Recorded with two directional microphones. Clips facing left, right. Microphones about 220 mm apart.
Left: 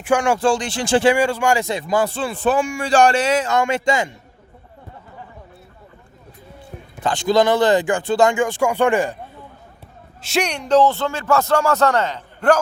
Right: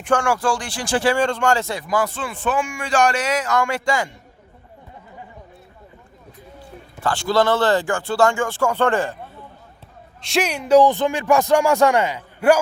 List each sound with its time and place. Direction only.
0.0 s speech: 10° left (ahead or behind)
0.3 s a man's voice: 25° left (ahead or behind)
1.1 s a man's voice: 10° left (ahead or behind)
7.0 s speech: 20° left (ahead or behind)
10.2 s speech: centre (ahead or behind)